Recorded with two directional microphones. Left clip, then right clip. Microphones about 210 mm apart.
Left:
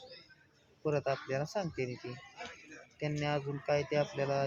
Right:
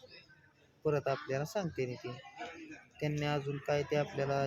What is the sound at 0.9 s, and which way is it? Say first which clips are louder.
Speech: even; 10° left (ahead or behind).